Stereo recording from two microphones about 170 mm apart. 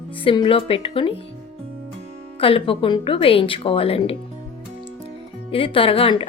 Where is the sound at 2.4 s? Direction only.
30° left (ahead or behind).